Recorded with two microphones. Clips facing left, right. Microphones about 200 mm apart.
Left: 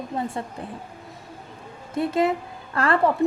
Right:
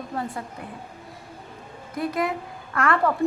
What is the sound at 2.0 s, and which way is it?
A woman's voice, 25° left (ahead or behind).